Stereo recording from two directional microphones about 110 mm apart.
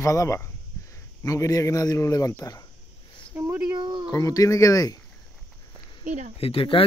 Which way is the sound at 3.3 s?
20° right (ahead or behind).